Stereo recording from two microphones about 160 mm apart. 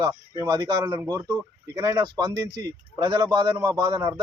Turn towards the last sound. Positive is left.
turn(degrees=-25)  # may be behind; listen again after turning